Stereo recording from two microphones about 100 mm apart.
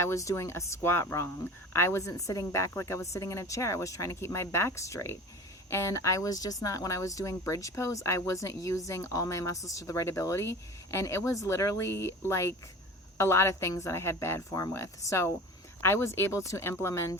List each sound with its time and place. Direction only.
0.0 s a woman's voice: 30° left (ahead or behind)